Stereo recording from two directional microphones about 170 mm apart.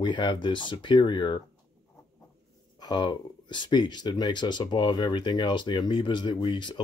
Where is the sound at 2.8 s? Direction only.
25° left (ahead or behind).